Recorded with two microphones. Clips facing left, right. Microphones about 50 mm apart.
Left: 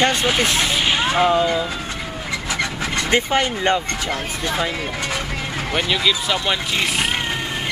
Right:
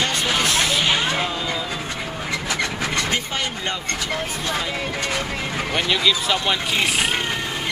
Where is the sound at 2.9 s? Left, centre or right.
Left.